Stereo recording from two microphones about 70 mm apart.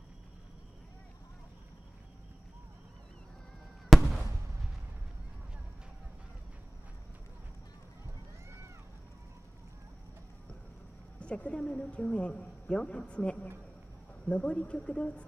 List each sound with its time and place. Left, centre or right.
3.9 s fireworks: centre
11.1 s a woman's voice: centre